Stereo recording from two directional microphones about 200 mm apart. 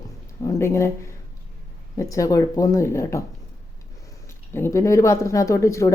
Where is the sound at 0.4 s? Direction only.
15° left (ahead or behind).